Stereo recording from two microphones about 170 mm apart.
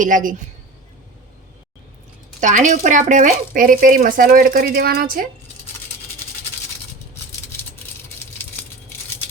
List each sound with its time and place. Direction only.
0.0 s a woman's voice: 50° right (ahead or behind)
2.4 s speech: 50° right (ahead or behind)